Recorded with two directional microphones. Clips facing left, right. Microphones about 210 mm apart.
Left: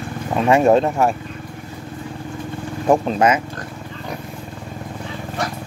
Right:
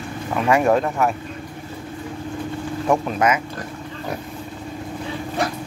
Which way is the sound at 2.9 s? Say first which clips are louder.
Left 4 dB; 30° left (ahead or behind).